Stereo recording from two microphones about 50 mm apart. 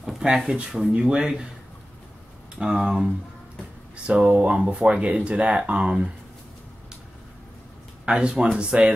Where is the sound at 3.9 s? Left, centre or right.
Right.